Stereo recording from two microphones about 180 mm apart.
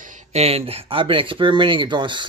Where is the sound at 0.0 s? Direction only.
45° right (ahead or behind).